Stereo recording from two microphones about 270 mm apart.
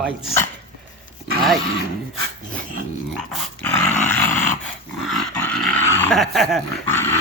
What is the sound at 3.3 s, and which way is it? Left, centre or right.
Dog, centre.